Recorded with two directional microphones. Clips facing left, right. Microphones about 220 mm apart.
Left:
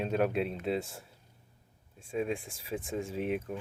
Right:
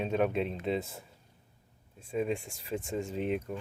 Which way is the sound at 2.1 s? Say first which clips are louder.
Right 1 dB; centre (ahead or behind).